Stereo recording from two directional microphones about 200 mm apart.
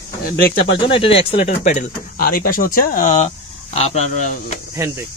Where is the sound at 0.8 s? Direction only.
25° left (ahead or behind).